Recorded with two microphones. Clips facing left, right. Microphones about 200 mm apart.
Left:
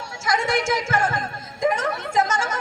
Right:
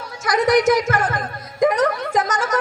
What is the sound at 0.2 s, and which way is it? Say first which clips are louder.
Speech: right 7 dB; 25° left (ahead or behind).